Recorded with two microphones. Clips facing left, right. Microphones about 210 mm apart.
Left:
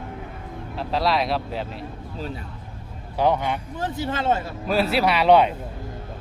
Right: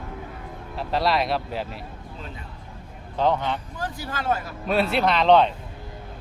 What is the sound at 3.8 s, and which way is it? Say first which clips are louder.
Speech: left 5 dB; 25° left (ahead or behind).